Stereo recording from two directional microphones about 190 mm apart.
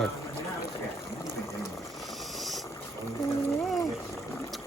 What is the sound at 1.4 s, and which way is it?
Boiling, 15° left (ahead or behind).